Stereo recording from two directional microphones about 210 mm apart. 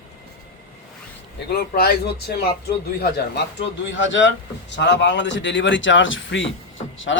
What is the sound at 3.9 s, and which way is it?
Speech, 65° left (ahead or behind).